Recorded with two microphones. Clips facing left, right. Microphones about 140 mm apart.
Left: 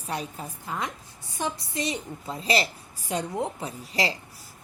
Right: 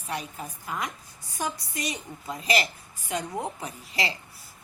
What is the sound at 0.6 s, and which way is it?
A woman's voice, 25° left (ahead or behind).